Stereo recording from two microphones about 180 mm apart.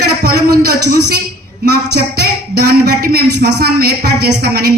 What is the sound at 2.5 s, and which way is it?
A woman's voice, 65° right (ahead or behind).